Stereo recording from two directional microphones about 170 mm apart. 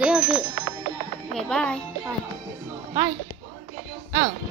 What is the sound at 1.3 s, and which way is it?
Speech, 5° left (ahead or behind).